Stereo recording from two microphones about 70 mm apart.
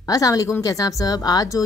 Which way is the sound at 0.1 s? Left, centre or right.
Left.